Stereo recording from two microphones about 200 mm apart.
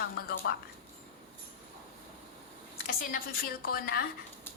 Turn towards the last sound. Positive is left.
turn(degrees=50)  # may be behind; listen again after turning